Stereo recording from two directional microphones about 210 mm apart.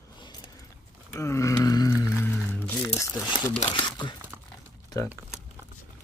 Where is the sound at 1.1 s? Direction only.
15° left (ahead or behind).